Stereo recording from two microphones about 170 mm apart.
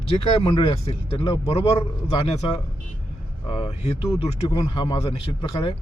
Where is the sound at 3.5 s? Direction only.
35° left (ahead or behind).